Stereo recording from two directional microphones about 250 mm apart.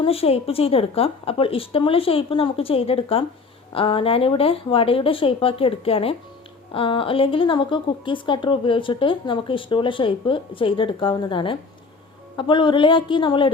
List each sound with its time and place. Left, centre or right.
0.0 s speech: left